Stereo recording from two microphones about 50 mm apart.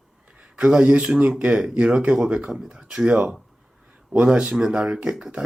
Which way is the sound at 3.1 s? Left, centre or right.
Right.